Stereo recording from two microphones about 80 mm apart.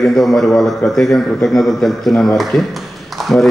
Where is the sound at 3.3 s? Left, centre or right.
Centre.